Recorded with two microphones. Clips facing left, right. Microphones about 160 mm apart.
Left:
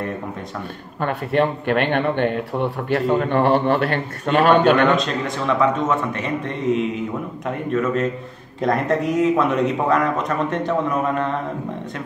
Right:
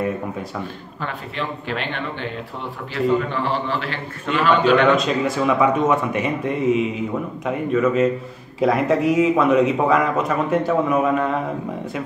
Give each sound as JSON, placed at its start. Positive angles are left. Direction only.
{"t": 1.0, "sound": "speech", "side_deg": 55}
{"t": 4.9, "sound": "a man's voice", "side_deg": -5}